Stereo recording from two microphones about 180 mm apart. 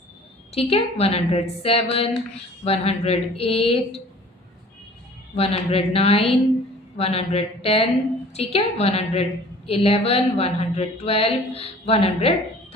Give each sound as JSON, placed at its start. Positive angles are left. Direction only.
{"t": 0.5, "sound": "speech", "side_deg": 35}
{"t": 5.4, "sound": "speech", "side_deg": 35}